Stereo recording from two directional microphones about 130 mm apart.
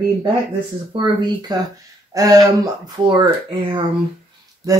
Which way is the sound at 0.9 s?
30° right (ahead or behind).